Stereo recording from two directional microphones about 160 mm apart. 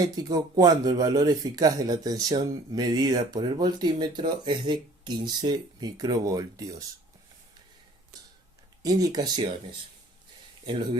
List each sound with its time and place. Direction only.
0.0 s speech: 25° right (ahead or behind)
8.8 s speech: 25° right (ahead or behind)